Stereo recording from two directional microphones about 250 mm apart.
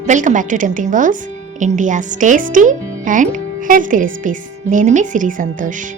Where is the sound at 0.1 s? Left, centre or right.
Right.